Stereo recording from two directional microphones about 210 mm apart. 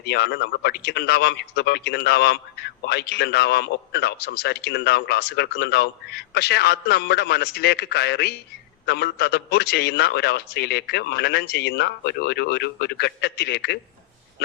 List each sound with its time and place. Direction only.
0.0 s speech: 50° left (ahead or behind)